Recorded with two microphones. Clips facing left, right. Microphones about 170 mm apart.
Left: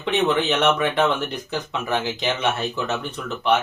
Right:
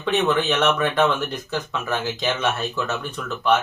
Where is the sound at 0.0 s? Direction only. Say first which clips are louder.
Even; 20° left (ahead or behind).